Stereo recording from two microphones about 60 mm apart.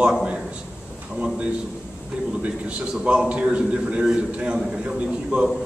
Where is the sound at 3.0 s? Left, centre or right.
Centre.